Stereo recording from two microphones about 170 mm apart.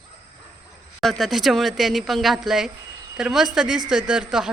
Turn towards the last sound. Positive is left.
turn(degrees=-5)  # may be behind; listen again after turning